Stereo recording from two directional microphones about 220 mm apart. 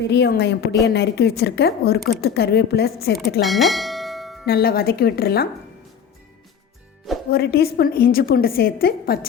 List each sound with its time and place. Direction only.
0.0 s a woman's voice: 50° left (ahead or behind)
3.4 s bell: centre (ahead or behind)
4.4 s a woman's voice: 45° left (ahead or behind)
7.3 s a woman's voice: 45° left (ahead or behind)